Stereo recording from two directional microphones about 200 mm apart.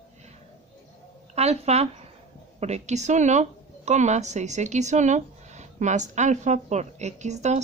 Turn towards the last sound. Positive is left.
turn(degrees=-35)  # may be behind; listen again after turning